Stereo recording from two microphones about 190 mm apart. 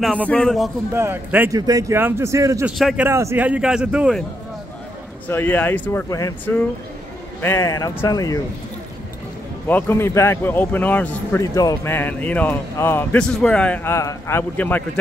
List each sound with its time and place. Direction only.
0.0 s speech: 5° right (ahead or behind)
0.3 s a man's voice: 5° left (ahead or behind)
0.9 s speech: 10° right (ahead or behind)
2.8 s a man's voice: centre (ahead or behind)
3.1 s speech: 15° right (ahead or behind)
5.3 s a man's voice: 10° left (ahead or behind)
9.7 s a man's voice: 10° left (ahead or behind)